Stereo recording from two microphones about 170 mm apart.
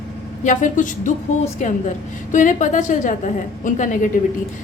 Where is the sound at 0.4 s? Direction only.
50° left (ahead or behind).